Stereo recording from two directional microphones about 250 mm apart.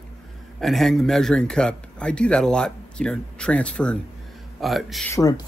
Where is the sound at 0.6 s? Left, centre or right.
Centre.